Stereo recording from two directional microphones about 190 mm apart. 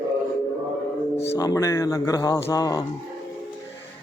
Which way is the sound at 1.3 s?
15° left (ahead or behind).